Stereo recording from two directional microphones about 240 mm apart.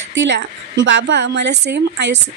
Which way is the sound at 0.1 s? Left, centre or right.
Right.